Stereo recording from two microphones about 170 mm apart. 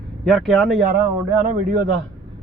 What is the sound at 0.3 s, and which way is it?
Speech, centre (ahead or behind).